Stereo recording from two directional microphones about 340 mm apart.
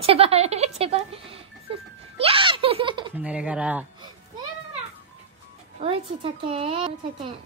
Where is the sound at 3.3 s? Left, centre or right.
Centre.